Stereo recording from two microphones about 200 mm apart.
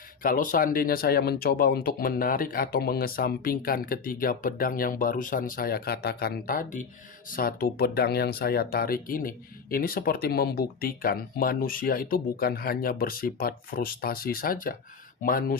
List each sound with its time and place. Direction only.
0.2 s speech: 45° left (ahead or behind)